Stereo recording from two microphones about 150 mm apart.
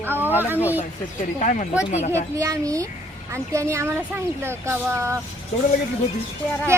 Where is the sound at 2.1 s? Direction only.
20° right (ahead or behind).